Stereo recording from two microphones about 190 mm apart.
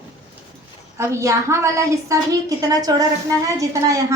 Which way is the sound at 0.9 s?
15° right (ahead or behind).